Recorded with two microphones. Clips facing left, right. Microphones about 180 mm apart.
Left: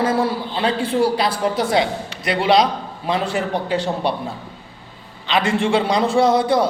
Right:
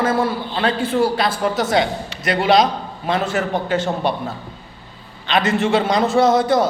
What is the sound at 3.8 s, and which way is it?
Speech, 30° left (ahead or behind).